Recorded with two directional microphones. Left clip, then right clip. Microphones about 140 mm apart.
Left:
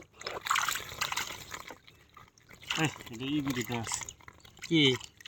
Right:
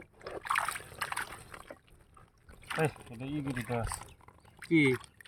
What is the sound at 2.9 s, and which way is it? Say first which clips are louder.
Speech: left 6 dB; 45° left (ahead or behind).